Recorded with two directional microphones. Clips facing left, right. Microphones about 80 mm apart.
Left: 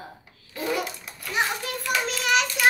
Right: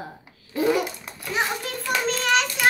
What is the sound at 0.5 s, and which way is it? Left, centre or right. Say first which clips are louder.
Babbling: right 6 dB; right.